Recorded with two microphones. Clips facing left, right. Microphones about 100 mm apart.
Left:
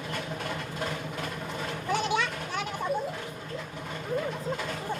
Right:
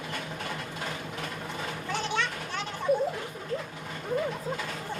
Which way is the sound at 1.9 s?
15° left (ahead or behind).